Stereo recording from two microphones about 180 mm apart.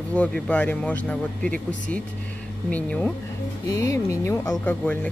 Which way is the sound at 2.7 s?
10° left (ahead or behind).